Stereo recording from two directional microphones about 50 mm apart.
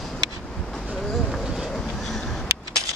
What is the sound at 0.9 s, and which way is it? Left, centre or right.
Vehicle, centre.